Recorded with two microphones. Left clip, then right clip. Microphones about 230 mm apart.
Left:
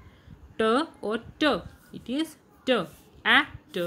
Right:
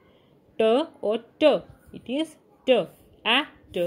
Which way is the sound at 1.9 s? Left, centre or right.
Centre.